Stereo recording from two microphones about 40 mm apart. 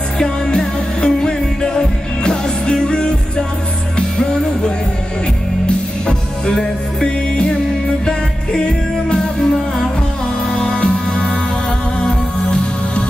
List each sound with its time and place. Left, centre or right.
0.2 s music: centre
7.0 s music: left